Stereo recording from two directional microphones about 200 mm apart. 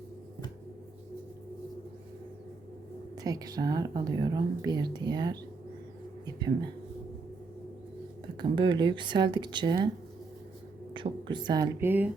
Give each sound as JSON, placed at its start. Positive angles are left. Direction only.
{"t": 3.2, "sound": "a woman's voice", "side_deg": -20}
{"t": 6.2, "sound": "a sound", "side_deg": -20}
{"t": 8.4, "sound": "a woman's voice", "side_deg": -25}
{"t": 10.9, "sound": "a woman's voice", "side_deg": -25}